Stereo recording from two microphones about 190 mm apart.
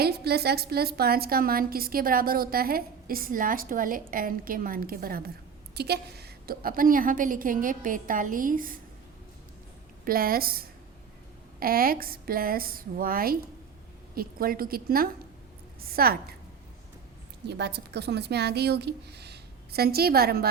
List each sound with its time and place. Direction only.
0.0 s a woman's voice: 55° right (ahead or behind)
10.0 s a woman's voice: 50° right (ahead or behind)
17.4 s a woman's voice: 60° right (ahead or behind)